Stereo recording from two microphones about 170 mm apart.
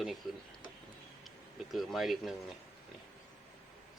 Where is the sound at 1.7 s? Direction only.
Centre (ahead or behind).